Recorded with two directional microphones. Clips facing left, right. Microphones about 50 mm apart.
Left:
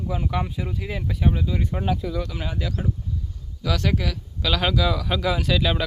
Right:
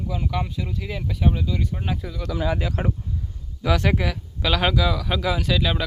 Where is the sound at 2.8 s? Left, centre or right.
Right.